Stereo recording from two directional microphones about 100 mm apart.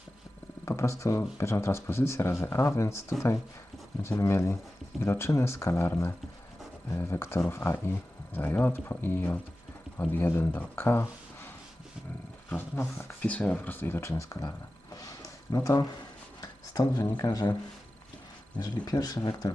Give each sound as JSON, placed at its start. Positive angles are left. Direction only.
{"t": 0.6, "sound": "speech", "side_deg": 30}
{"t": 4.2, "sound": "speech", "side_deg": 25}
{"t": 12.5, "sound": "speech", "side_deg": 20}
{"t": 15.5, "sound": "speech", "side_deg": 35}
{"t": 18.6, "sound": "speech", "side_deg": 40}